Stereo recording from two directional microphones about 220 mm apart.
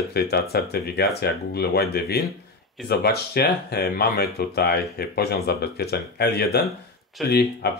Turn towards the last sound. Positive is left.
turn(degrees=45)  # may be behind; listen again after turning